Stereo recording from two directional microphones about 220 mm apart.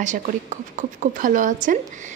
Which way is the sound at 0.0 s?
35° right (ahead or behind).